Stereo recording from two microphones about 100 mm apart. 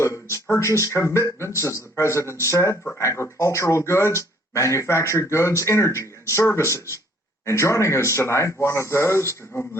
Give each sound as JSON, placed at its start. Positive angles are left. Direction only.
{"t": 0.0, "sound": "speech", "side_deg": 30}